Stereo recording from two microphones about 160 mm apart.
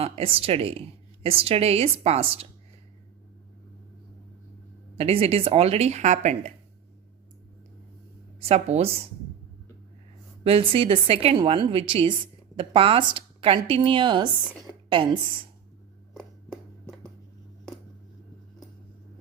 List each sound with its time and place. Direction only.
0.0 s a woman's voice: 35° right (ahead or behind)
4.9 s a woman's voice: 40° right (ahead or behind)
8.4 s a woman's voice: 40° right (ahead or behind)
10.4 s a woman's voice: 35° right (ahead or behind)